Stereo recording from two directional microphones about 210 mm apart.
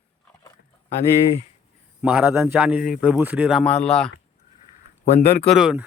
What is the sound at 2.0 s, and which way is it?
Speech, 5° right (ahead or behind).